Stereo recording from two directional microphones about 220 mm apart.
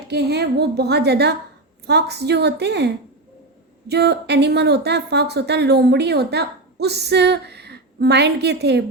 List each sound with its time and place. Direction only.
0.1 s speech: 50° right (ahead or behind)